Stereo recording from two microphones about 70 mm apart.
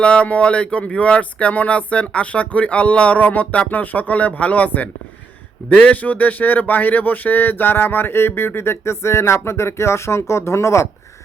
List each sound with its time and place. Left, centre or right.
0.0 s speech: centre; by 10.8 s left